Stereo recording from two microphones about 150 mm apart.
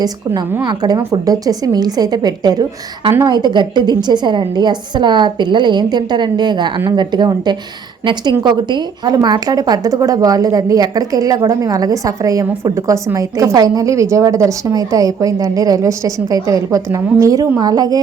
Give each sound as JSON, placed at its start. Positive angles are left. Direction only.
{"t": 0.6, "sound": "a woman's voice", "side_deg": -25}